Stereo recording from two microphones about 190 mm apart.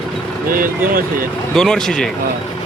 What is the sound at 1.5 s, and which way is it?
Speech, centre (ahead or behind).